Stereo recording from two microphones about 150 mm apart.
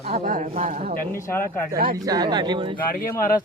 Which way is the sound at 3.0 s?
70° left (ahead or behind).